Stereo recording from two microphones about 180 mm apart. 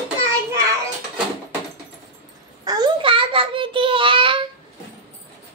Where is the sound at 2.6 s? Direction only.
25° right (ahead or behind).